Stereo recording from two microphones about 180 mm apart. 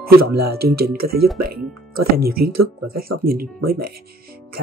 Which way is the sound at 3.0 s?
55° right (ahead or behind).